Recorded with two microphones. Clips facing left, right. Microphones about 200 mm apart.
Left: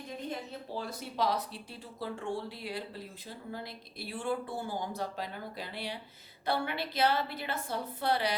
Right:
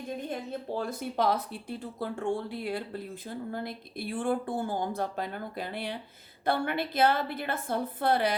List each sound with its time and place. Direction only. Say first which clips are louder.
0.8 s speech: right 3 dB; 50° right (ahead or behind)